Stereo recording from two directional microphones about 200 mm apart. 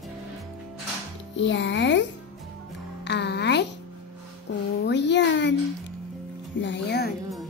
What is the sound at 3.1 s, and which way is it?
Speech, 55° left (ahead or behind).